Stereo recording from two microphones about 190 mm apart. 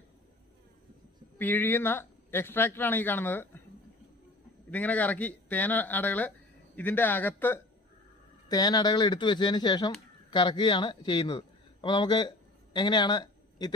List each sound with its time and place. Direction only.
1.4 s speech: 10° left (ahead or behind)
4.6 s speech: 10° left (ahead or behind)
8.5 s a man's voice: 20° left (ahead or behind)